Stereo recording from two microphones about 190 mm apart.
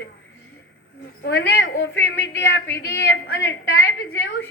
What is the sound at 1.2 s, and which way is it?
A woman's voice, 60° left (ahead or behind).